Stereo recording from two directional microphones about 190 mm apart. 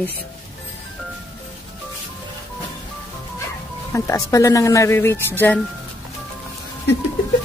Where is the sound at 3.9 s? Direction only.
15° left (ahead or behind).